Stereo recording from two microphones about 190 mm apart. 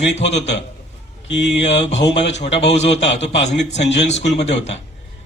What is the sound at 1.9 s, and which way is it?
Speech, 70° left (ahead or behind).